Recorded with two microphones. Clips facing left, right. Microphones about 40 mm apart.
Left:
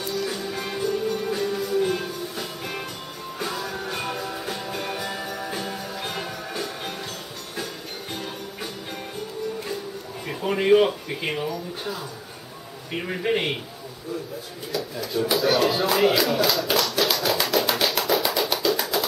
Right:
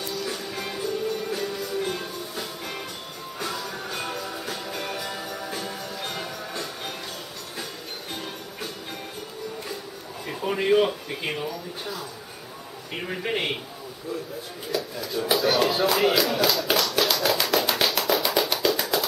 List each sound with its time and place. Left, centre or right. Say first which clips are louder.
0.1 s music: left 3 dB; centre
10.2 s speech: left 2 dB; centre
12.9 s a man's voice: left 4 dB; centre
14.7 s a man's voice: left 1 dB; centre
15.3 s a sound: left 1 dB; centre